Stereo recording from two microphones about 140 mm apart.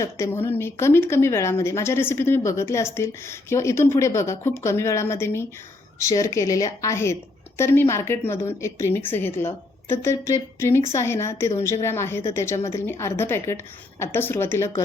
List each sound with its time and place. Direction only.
0.0 s a woman's voice: 20° left (ahead or behind)